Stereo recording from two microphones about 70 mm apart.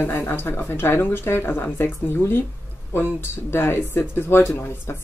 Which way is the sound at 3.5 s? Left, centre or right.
Left.